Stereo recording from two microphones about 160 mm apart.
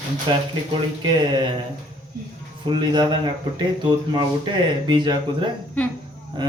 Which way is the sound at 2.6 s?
30° right (ahead or behind).